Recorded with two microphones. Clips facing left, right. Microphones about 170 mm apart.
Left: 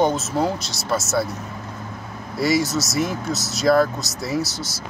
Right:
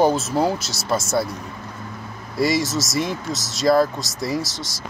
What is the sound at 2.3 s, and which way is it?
Speech, centre (ahead or behind).